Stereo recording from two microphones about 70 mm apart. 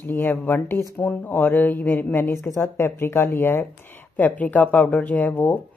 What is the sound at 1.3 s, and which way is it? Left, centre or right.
Speech, left.